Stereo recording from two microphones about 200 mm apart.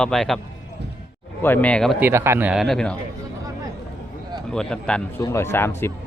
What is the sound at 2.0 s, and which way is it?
Speech, 10° right (ahead or behind).